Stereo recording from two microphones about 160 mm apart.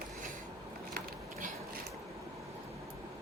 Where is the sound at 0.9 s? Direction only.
55° right (ahead or behind).